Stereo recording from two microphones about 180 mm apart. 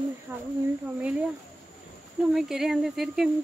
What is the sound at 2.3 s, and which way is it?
Speech, centre (ahead or behind).